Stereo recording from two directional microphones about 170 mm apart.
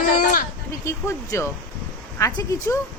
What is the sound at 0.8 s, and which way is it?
Speech, 15° left (ahead or behind).